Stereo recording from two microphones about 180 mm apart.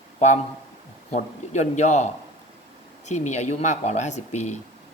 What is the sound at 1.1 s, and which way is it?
Speech, 40° left (ahead or behind).